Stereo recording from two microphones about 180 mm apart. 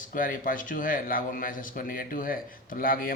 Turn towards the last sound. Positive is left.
turn(degrees=50)  # may be behind; listen again after turning